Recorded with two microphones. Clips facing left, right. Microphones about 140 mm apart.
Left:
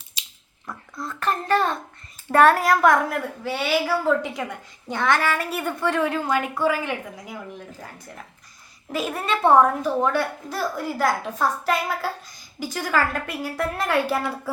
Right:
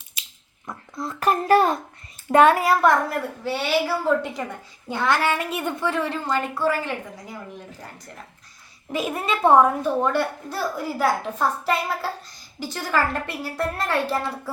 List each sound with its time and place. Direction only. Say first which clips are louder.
0.7 s speech: right 2 dB; 25° right (ahead or behind)
1.2 s a child's voice: right 4 dB; 10° right (ahead or behind)
4.9 s a child's voice: even; 10° right (ahead or behind)
6.1 s a woman's voice: left 2 dB; 5° left (ahead or behind)
8.9 s a child's voice: even; centre (ahead or behind)
11.6 s a woman's voice: even; 5° left (ahead or behind)